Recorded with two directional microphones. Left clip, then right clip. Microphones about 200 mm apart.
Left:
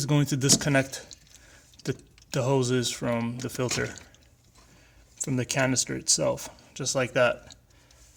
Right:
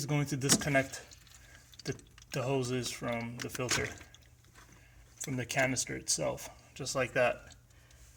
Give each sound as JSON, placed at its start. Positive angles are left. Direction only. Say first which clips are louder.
{"t": 0.0, "sound": "speech", "louder": "left 8 dB", "side_deg": 35}
{"t": 5.2, "sound": "speech", "louder": "left 5 dB", "side_deg": 35}